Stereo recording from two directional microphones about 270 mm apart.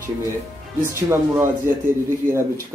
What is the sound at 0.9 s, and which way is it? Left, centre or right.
Speech, centre.